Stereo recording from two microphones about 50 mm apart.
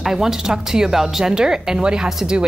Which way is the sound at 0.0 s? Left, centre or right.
Centre.